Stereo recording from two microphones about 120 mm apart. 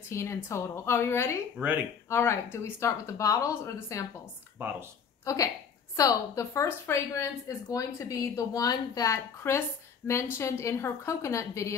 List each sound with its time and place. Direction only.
0.1 s speech: 25° left (ahead or behind)
1.6 s speech: 15° right (ahead or behind)
2.0 s speech: 20° left (ahead or behind)
4.6 s speech: 15° right (ahead or behind)
5.2 s a woman's voice: 25° left (ahead or behind)